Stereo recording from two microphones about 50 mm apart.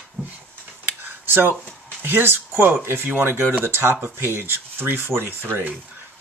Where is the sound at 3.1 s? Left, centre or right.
Right.